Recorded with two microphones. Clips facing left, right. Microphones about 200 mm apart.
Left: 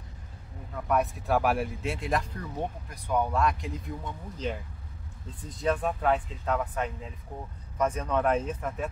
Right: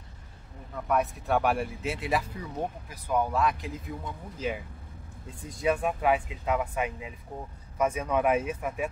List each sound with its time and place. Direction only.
0.7 s speech: centre (ahead or behind)